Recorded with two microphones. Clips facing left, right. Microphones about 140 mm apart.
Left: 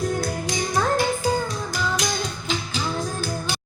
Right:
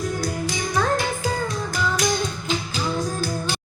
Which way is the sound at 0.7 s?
10° left (ahead or behind).